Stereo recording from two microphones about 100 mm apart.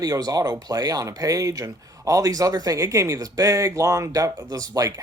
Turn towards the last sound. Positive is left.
turn(degrees=-35)  # may be behind; listen again after turning